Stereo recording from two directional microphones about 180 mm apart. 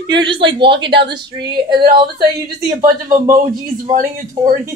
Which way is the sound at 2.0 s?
20° right (ahead or behind).